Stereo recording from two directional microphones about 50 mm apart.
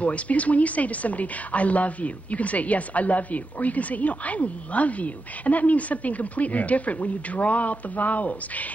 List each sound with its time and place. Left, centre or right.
0.0 s speech: left